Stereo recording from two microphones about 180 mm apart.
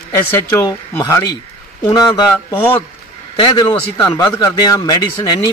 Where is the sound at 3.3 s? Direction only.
25° left (ahead or behind).